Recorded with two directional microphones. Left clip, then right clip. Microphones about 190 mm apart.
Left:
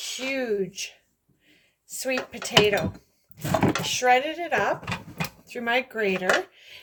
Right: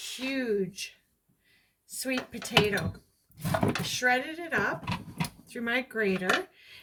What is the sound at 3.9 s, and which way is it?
Speech, 25° right (ahead or behind).